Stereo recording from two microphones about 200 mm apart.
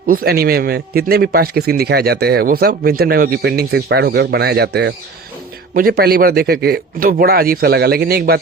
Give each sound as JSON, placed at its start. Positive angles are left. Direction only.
{"t": 0.1, "sound": "a man's voice", "side_deg": -50}